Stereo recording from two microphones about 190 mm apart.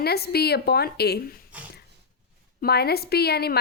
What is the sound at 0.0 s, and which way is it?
A woman's voice, 55° left (ahead or behind).